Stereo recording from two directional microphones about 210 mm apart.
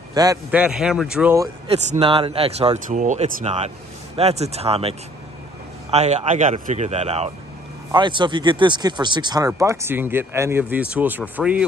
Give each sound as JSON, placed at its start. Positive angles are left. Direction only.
{"t": 0.1, "sound": "a man's voice", "side_deg": -20}
{"t": 0.5, "sound": "speech", "side_deg": -5}
{"t": 1.7, "sound": "speech", "side_deg": -30}